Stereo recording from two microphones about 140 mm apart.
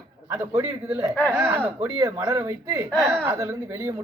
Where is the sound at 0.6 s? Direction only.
20° right (ahead or behind).